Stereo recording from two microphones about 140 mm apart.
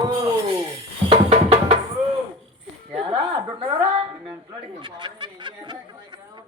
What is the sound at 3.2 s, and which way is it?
A woman's voice, 35° right (ahead or behind).